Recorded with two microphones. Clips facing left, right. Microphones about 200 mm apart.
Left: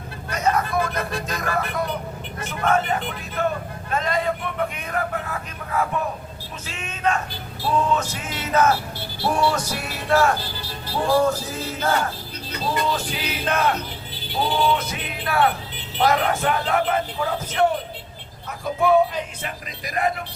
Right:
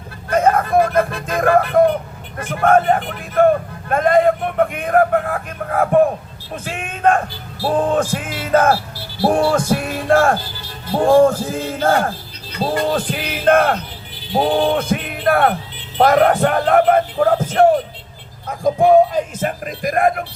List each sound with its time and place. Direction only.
0.3 s vehicle: 55° right (ahead or behind)
0.9 s a man's voice: 50° right (ahead or behind)
18.8 s a man's voice: 40° right (ahead or behind)